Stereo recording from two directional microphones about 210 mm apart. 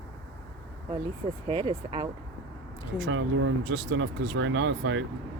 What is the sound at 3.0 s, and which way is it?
Speech, 70° right (ahead or behind).